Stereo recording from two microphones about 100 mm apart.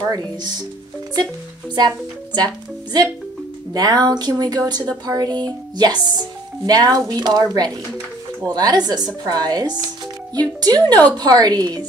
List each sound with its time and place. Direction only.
0.1 s speech: 40° right (ahead or behind)
1.8 s speech: 45° right (ahead or behind)